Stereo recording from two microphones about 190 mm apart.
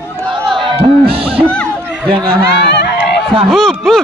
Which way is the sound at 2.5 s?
65° left (ahead or behind).